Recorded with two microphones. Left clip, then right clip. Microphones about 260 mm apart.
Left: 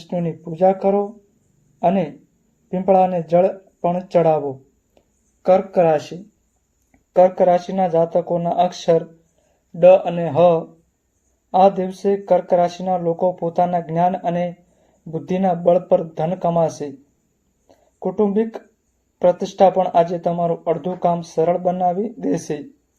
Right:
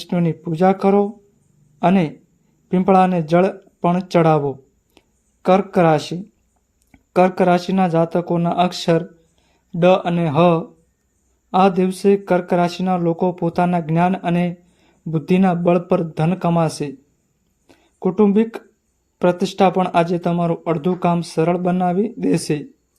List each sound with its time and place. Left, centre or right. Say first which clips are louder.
0.0 s speech: right 2 dB; right
4.9 s a sound: right 5 dB; right
6.9 s speech: left 2 dB; right
11.5 s speech: left 1 dB; right
18.2 s speech: right 2 dB; right